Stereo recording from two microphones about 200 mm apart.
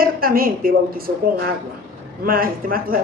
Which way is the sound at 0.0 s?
45° right (ahead or behind).